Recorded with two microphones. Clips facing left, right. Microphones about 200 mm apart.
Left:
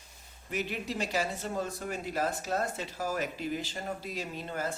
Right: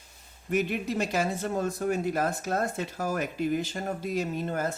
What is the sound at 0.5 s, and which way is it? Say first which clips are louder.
Speech: right 7 dB; 50° right (ahead or behind).